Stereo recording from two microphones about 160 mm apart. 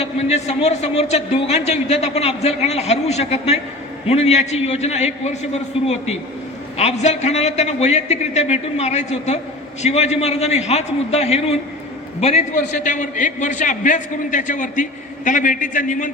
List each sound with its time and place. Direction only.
0.0 s a man's voice: 45° left (ahead or behind)